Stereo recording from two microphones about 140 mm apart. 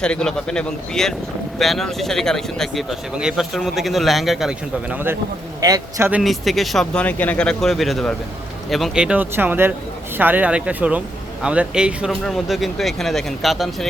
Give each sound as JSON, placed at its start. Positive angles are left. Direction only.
{"t": 0.0, "sound": "speech", "side_deg": 5}
{"t": 5.5, "sound": "a man's voice", "side_deg": -25}
{"t": 6.1, "sound": "speech", "side_deg": -5}